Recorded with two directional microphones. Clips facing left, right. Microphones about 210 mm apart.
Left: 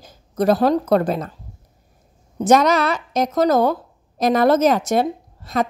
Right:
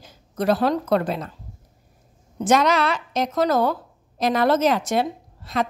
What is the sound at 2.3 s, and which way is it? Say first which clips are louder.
A woman's voice: left 4 dB; 40° left (ahead or behind).